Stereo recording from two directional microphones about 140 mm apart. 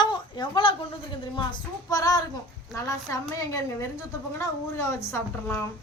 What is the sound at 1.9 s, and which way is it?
A woman's voice, 25° left (ahead or behind).